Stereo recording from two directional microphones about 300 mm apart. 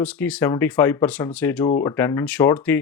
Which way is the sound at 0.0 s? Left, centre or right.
Centre.